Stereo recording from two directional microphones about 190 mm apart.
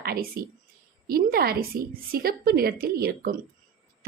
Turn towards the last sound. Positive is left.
turn(degrees=-50)  # may be behind; listen again after turning